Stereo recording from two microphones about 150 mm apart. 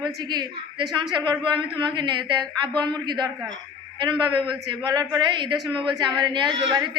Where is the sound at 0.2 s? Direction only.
30° right (ahead or behind).